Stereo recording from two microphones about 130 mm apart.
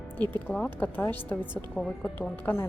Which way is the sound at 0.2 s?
15° left (ahead or behind).